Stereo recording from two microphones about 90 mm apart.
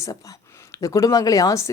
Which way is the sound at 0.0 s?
35° left (ahead or behind).